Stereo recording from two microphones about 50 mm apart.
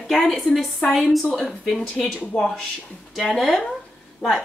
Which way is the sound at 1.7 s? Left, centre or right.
Centre.